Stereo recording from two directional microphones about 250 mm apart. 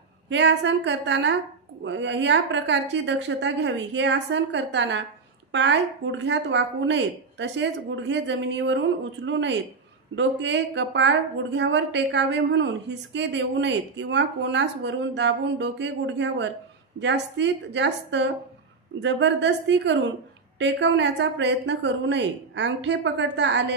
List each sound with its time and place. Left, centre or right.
0.3 s speech: right